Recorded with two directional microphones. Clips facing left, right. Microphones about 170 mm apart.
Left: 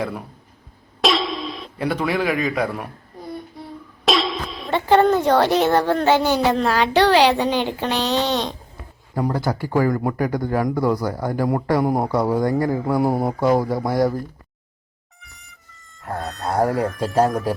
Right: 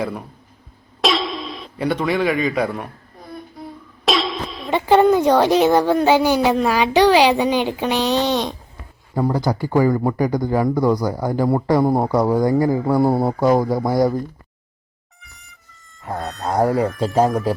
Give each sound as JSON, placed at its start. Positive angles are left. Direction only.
{"t": 1.0, "sound": "a sound", "side_deg": 0}
{"t": 4.0, "sound": "cough", "side_deg": 0}
{"t": 4.7, "sound": "a woman's voice", "side_deg": -10}
{"t": 9.3, "sound": "speech", "side_deg": 0}
{"t": 13.1, "sound": "speech", "side_deg": -35}
{"t": 13.6, "sound": "speech", "side_deg": 0}
{"t": 15.2, "sound": "a sound", "side_deg": 0}
{"t": 16.1, "sound": "speech", "side_deg": 0}